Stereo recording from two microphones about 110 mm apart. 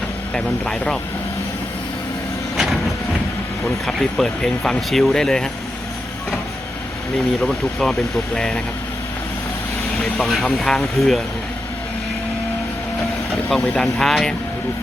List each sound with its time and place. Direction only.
0.3 s speech: 5° left (ahead or behind)
2.6 s vehicle: centre (ahead or behind)
3.6 s speech: centre (ahead or behind)
7.4 s speech: 5° left (ahead or behind)
10.0 s speech: centre (ahead or behind)
13.5 s speech: 5° left (ahead or behind)